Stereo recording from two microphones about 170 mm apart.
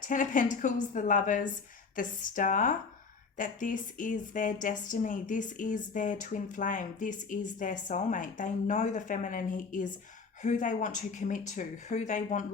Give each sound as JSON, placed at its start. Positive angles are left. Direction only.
{"t": 0.0, "sound": "a woman's voice", "side_deg": 50}